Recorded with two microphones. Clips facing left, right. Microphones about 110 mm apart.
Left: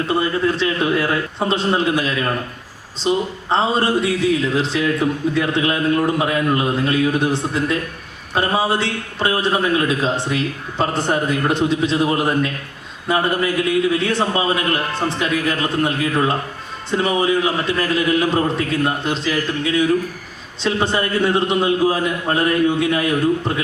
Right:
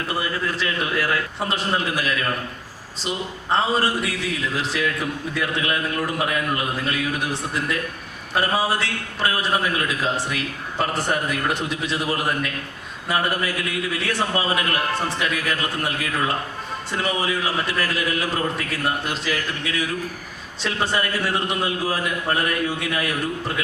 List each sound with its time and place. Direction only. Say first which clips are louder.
0.1 s a man's voice: left 8 dB; 25° left (ahead or behind)